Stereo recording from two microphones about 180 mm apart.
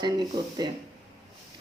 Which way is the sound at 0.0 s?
25° right (ahead or behind).